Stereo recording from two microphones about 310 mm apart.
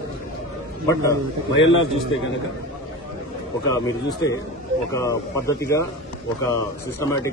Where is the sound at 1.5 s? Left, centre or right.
Left.